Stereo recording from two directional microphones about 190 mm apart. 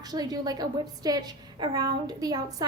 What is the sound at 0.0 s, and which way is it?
A woman's voice, 20° right (ahead or behind).